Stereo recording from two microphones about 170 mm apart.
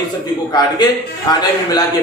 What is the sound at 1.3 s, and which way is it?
Speech, 25° left (ahead or behind).